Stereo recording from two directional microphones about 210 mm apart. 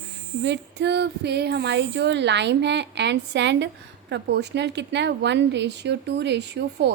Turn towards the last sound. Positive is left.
turn(degrees=-55)  # may be behind; listen again after turning